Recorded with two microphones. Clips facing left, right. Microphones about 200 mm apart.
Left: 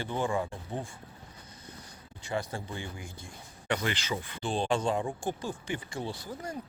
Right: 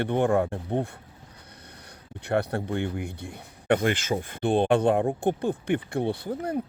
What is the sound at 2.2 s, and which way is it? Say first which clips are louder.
Speech: right 8 dB; 65° right (ahead or behind).